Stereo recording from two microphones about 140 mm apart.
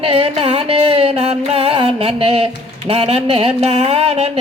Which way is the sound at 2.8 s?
45° right (ahead or behind).